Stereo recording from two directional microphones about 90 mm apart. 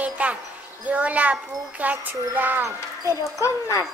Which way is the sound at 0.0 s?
15° right (ahead or behind).